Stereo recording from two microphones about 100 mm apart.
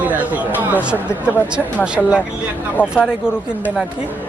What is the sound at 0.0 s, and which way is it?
Speech, 15° right (ahead or behind).